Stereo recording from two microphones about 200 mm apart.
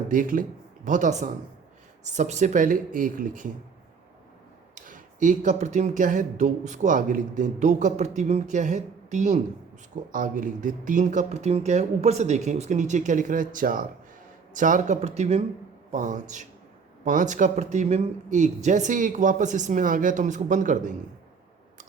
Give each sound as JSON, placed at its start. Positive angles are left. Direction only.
{"t": 0.1, "sound": "speech", "side_deg": -40}
{"t": 4.7, "sound": "speech", "side_deg": -40}